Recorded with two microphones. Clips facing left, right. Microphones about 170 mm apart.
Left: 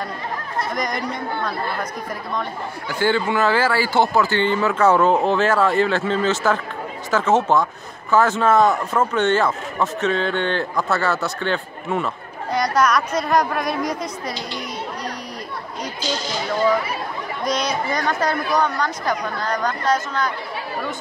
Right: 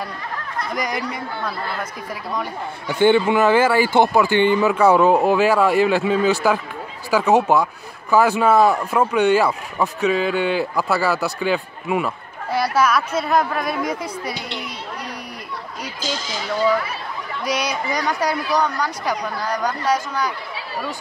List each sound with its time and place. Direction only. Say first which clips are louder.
0.7 s a man's voice: even; 10° right (ahead or behind)
3.0 s a man's voice: right 4 dB; 15° right (ahead or behind)
17.5 s a man's voice: left 1 dB; 10° right (ahead or behind)